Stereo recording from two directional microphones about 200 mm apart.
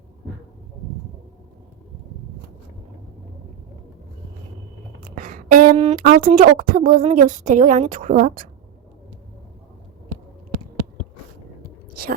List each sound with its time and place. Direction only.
5.1 s speech: 40° right (ahead or behind)